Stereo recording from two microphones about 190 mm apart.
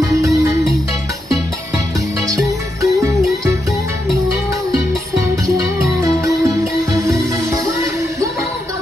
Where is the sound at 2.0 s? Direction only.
15° right (ahead or behind).